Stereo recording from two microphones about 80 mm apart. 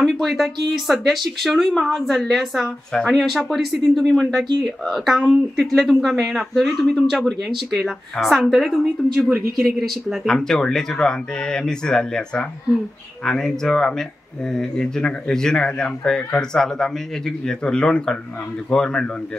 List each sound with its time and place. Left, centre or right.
0.0 s speech: centre
10.2 s speech: centre